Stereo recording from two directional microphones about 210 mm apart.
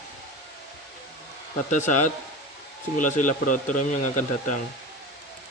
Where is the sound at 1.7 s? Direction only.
35° left (ahead or behind).